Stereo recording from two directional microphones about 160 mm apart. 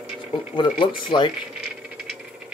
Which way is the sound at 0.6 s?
30° left (ahead or behind).